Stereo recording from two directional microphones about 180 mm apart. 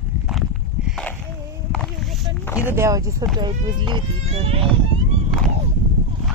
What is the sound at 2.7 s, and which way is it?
Speech, 15° right (ahead or behind).